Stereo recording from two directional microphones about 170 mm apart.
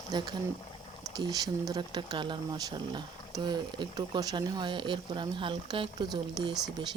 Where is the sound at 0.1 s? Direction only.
25° right (ahead or behind).